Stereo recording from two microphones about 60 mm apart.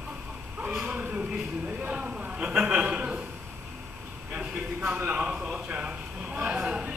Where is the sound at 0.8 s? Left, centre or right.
Right.